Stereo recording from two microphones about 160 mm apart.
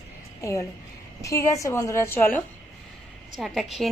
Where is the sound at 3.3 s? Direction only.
Centre (ahead or behind).